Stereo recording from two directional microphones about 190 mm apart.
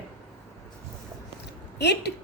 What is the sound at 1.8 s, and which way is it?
Speech, 60° left (ahead or behind).